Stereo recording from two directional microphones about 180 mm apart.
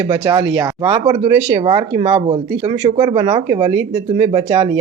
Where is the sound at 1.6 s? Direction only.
30° right (ahead or behind).